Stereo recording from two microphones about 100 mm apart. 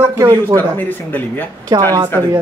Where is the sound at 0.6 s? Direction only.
20° left (ahead or behind).